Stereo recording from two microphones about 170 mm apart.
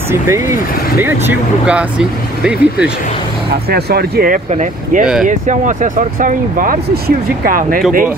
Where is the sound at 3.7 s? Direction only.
65° right (ahead or behind).